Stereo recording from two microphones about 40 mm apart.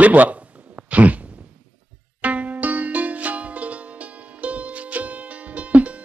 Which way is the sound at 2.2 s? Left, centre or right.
Right.